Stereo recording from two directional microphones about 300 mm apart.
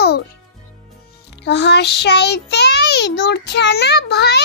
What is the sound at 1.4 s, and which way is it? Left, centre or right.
A child's voice, left.